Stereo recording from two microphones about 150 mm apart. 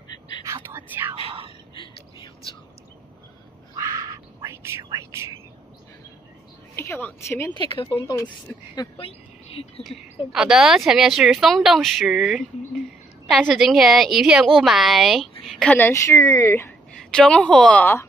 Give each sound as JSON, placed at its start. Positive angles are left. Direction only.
{"t": 0.4, "sound": "whispering", "side_deg": -15}
{"t": 3.7, "sound": "whispering", "side_deg": -20}
{"t": 6.7, "sound": "a woman's voice", "side_deg": 15}
{"t": 7.9, "sound": "speech", "side_deg": 30}
{"t": 10.3, "sound": "a woman's voice", "side_deg": -5}
{"t": 15.9, "sound": "speech", "side_deg": 20}
{"t": 17.1, "sound": "speech", "side_deg": 5}